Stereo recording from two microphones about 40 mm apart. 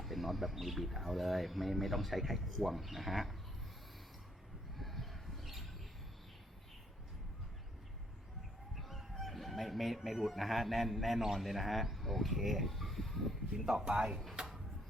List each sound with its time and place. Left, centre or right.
0.0 s speech: centre
4.8 s a sound: centre
8.7 s speech: centre
13.7 s speech: centre